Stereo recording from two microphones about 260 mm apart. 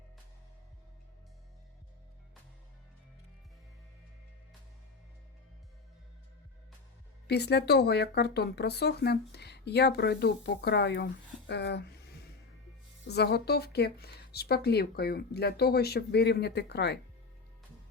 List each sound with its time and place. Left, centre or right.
7.3 s speech: left